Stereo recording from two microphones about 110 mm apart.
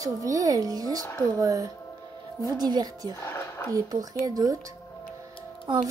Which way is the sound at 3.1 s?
25° left (ahead or behind).